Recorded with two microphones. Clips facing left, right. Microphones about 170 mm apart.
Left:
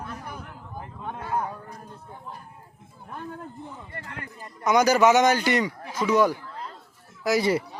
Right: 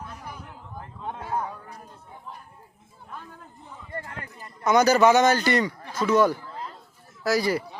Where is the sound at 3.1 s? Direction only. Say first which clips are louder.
Left 5 dB; 55° left (ahead or behind).